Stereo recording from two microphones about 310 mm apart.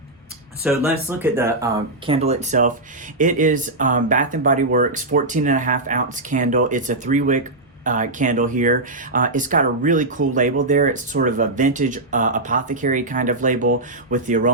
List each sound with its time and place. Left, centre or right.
0.6 s speech: centre; by 14.5 s right